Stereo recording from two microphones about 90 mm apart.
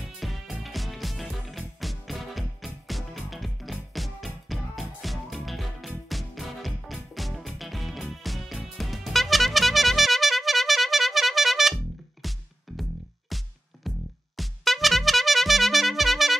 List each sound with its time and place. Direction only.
0.0 s music: 5° right (ahead or behind)